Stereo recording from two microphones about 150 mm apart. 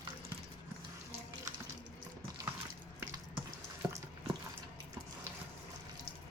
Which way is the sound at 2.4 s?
20° right (ahead or behind).